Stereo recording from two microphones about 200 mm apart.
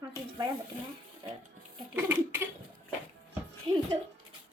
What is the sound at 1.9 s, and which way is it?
Speech, 10° right (ahead or behind).